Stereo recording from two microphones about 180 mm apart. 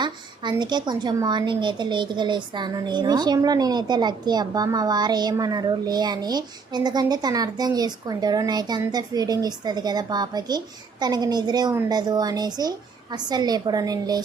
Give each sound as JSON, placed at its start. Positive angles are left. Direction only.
{"t": 0.5, "sound": "a woman's voice", "side_deg": -25}